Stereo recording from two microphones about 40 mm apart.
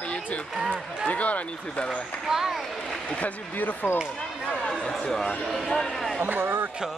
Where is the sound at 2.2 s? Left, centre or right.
Centre.